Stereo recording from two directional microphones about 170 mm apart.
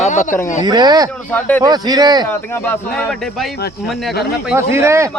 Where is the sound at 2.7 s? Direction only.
5° left (ahead or behind).